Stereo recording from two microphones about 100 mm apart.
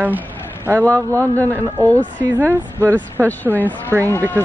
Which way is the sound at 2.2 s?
20° right (ahead or behind).